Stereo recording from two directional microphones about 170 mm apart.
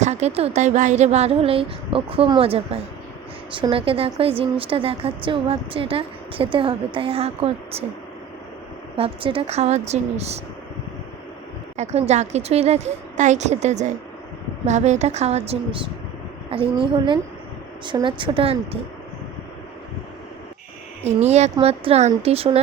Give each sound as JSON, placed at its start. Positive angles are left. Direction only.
{"t": 0.0, "sound": "speech", "side_deg": -40}
{"t": 9.0, "sound": "speech", "side_deg": -30}
{"t": 11.8, "sound": "speech", "side_deg": -40}
{"t": 21.0, "sound": "speech", "side_deg": -40}